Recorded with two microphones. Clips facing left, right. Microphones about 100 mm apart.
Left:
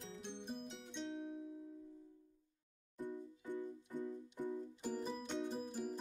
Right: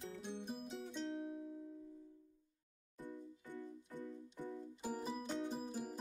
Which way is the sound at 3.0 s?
15° left (ahead or behind).